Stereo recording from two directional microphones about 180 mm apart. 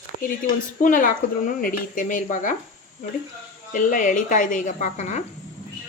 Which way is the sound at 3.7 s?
45° left (ahead or behind).